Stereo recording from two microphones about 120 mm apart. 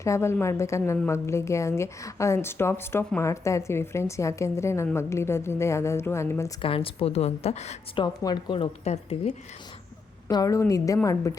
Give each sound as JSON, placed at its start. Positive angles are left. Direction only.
{"t": 0.0, "sound": "a woman's voice", "side_deg": 25}
{"t": 6.6, "sound": "a woman's voice", "side_deg": 50}
{"t": 7.9, "sound": "speech", "side_deg": 35}
{"t": 8.8, "sound": "a woman's voice", "side_deg": 65}
{"t": 10.2, "sound": "a woman's voice", "side_deg": 30}